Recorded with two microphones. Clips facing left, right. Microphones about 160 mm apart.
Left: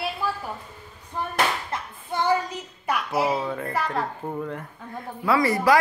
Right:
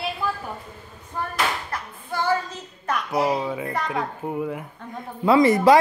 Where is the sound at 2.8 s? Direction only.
5° left (ahead or behind).